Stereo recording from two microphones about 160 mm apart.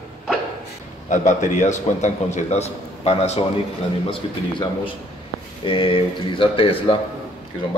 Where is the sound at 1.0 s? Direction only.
50° left (ahead or behind).